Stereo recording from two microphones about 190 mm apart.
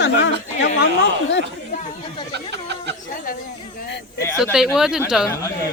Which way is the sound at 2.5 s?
65° right (ahead or behind).